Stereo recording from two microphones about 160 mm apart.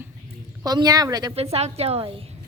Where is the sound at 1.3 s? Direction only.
40° right (ahead or behind).